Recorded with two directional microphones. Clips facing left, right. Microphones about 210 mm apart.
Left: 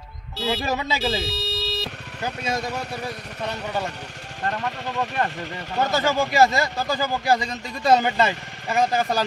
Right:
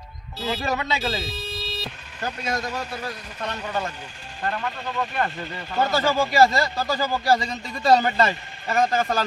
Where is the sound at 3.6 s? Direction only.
15° left (ahead or behind).